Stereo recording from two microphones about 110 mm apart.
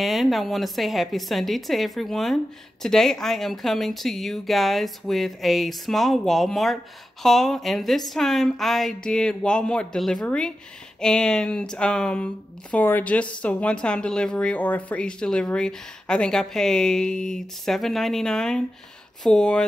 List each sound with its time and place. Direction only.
0.0 s speech: centre (ahead or behind)